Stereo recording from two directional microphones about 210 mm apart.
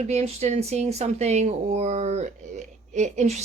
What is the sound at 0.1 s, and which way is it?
Speech, 30° right (ahead or behind).